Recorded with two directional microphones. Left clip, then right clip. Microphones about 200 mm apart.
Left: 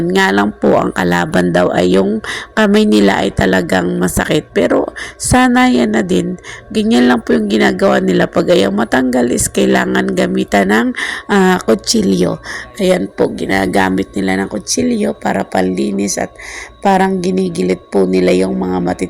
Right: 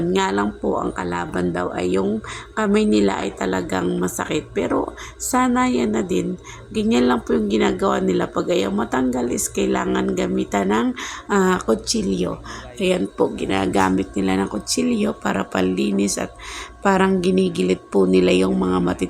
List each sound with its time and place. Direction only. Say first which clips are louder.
0.1 s speech: left 10 dB; 30° left (ahead or behind)
12.8 s a woman's voice: left 6 dB; 20° left (ahead or behind)